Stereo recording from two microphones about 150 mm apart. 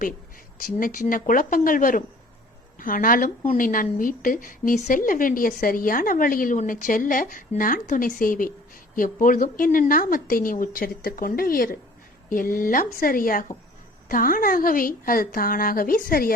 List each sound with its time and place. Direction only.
0.6 s a woman's voice: 65° left (ahead or behind)